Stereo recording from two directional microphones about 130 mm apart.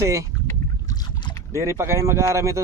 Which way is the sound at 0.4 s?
30° left (ahead or behind).